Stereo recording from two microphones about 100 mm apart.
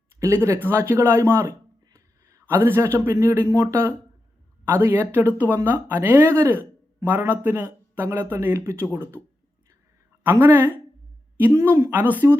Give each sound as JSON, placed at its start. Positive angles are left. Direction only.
{"t": 0.2, "sound": "a man's voice", "side_deg": -30}
{"t": 10.2, "sound": "a man's voice", "side_deg": -25}